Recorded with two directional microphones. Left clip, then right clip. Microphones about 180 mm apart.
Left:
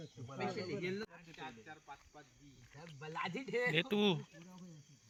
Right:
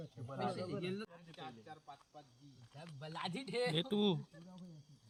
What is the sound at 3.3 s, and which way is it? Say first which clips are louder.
Speech: left 1 dB; 45° right (ahead or behind).